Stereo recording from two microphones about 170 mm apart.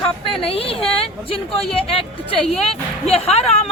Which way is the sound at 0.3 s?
35° left (ahead or behind).